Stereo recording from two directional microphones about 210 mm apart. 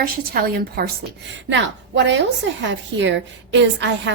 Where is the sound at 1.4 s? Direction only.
60° right (ahead or behind).